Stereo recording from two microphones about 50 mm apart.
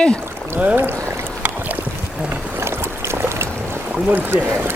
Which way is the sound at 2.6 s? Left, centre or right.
Right.